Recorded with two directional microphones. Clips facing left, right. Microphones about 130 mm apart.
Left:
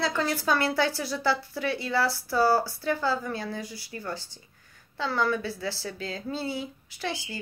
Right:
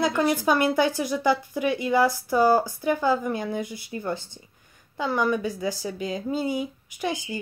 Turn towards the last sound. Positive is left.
turn(degrees=-15)  # may be behind; listen again after turning